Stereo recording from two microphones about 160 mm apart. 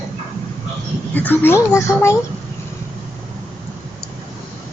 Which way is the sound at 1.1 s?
10° left (ahead or behind).